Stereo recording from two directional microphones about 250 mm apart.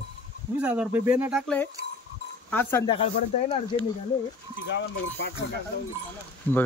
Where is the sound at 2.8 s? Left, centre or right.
Left.